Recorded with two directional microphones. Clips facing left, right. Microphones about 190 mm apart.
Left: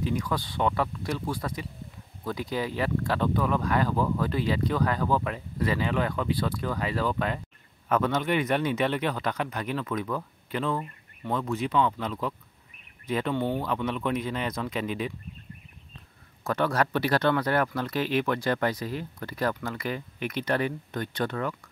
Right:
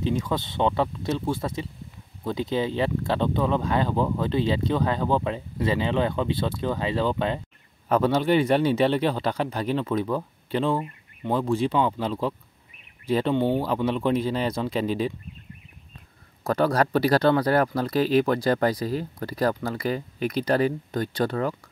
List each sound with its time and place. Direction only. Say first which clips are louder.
0.0 s speech: right 3 dB; 25° right (ahead or behind)
16.4 s speech: right 4 dB; 35° right (ahead or behind)